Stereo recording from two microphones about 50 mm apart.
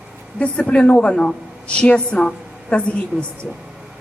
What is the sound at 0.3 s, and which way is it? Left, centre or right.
A woman's voice, left.